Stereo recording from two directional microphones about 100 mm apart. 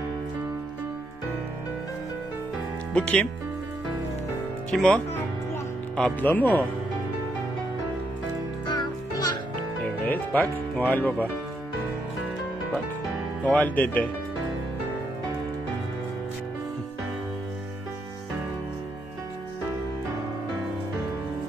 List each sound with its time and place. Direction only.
2.9 s speech: 15° left (ahead or behind)
4.6 s speech: 10° left (ahead or behind)
8.7 s music: 45° left (ahead or behind)
10.0 s speech: 15° left (ahead or behind)
13.4 s speech: 15° left (ahead or behind)